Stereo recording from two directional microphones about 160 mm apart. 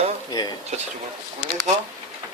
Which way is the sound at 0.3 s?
25° left (ahead or behind).